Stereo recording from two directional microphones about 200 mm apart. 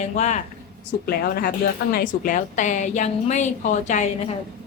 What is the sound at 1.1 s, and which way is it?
A woman's voice, 50° left (ahead or behind).